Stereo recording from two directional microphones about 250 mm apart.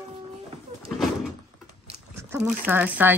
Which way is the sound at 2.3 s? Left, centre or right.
Centre.